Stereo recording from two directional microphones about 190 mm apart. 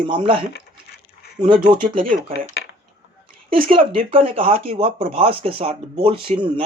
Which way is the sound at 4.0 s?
30° right (ahead or behind).